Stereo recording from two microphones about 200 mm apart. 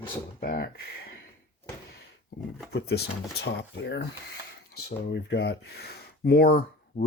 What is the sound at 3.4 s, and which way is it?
Speech, 60° left (ahead or behind).